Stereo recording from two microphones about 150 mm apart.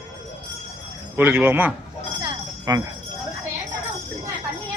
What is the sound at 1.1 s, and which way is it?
Speech, 15° right (ahead or behind).